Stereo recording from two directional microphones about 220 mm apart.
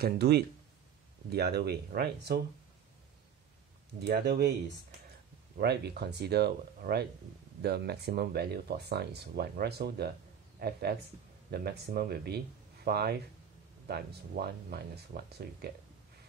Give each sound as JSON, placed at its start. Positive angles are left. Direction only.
{"t": 0.0, "sound": "speech", "side_deg": -50}
{"t": 4.0, "sound": "speech", "side_deg": -50}
{"t": 5.6, "sound": "speech", "side_deg": -50}